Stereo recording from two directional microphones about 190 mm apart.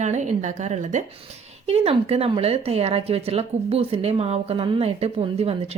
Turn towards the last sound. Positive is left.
turn(degrees=-30)  # may be behind; listen again after turning